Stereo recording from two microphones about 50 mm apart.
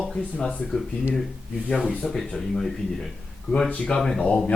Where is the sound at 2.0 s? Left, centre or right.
Left.